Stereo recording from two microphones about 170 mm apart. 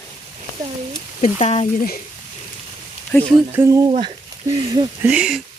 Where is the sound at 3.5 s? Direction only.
15° right (ahead or behind).